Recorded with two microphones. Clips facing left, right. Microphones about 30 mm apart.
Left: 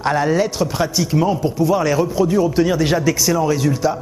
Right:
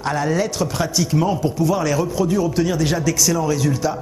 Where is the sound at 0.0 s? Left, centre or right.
Centre.